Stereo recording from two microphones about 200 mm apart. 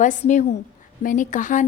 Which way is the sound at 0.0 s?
40° left (ahead or behind).